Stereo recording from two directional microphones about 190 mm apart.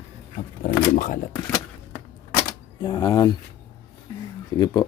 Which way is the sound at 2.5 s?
20° left (ahead or behind).